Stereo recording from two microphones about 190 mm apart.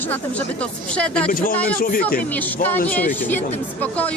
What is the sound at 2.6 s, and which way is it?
Speech, 10° left (ahead or behind).